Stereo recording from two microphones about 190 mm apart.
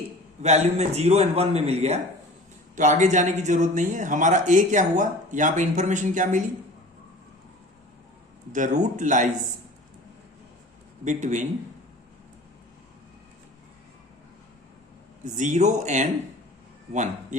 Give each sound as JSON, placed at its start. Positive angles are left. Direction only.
{"t": 0.4, "sound": "speech", "side_deg": -35}
{"t": 8.5, "sound": "speech", "side_deg": -40}
{"t": 11.0, "sound": "speech", "side_deg": -40}
{"t": 15.4, "sound": "speech", "side_deg": -40}